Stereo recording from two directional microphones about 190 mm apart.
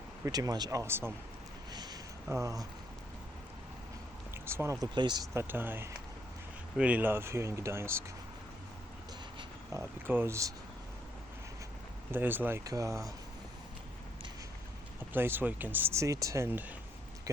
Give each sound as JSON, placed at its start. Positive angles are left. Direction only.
{"t": 0.3, "sound": "speech", "side_deg": -20}
{"t": 1.7, "sound": "a sound", "side_deg": -20}
{"t": 4.4, "sound": "speech", "side_deg": -15}
{"t": 10.1, "sound": "speech", "side_deg": -10}
{"t": 12.1, "sound": "speech", "side_deg": -10}
{"t": 15.1, "sound": "speech", "side_deg": -10}
{"t": 17.3, "sound": "a sound", "side_deg": -15}